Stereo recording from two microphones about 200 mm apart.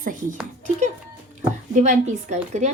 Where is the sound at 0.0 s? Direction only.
40° right (ahead or behind).